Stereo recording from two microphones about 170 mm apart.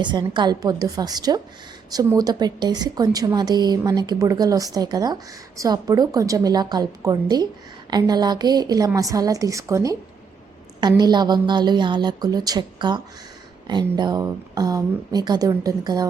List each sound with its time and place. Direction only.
0.0 s a woman's voice: 25° right (ahead or behind)